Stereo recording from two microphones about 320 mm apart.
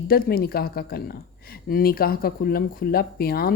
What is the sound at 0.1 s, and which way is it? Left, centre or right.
A woman's voice, left.